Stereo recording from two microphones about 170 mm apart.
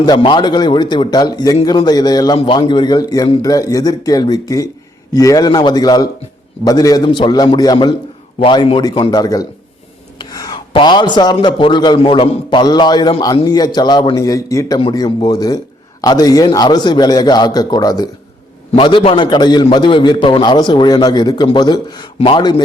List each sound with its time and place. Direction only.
0.0 s a man's voice: 25° left (ahead or behind)